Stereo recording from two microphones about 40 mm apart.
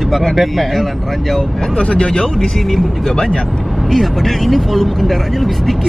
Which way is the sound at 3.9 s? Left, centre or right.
Centre.